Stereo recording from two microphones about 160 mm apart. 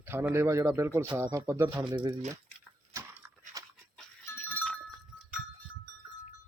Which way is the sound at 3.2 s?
10° right (ahead or behind).